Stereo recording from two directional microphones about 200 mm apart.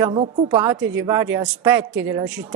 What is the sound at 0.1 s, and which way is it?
Speech, 30° right (ahead or behind).